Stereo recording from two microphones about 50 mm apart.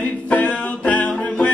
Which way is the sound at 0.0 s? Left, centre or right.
Left.